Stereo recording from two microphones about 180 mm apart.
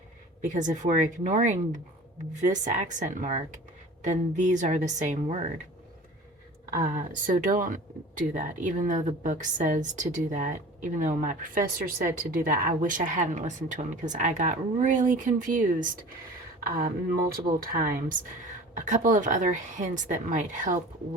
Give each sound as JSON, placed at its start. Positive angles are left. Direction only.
{"t": 0.4, "sound": "speech", "side_deg": -45}
{"t": 6.7, "sound": "speech", "side_deg": -50}